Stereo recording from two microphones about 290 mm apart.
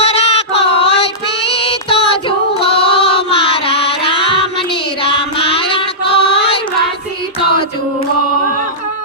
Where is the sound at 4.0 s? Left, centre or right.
Centre.